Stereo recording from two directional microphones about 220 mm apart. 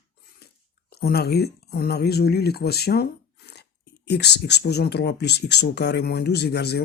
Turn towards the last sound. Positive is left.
turn(degrees=50)  # may be behind; listen again after turning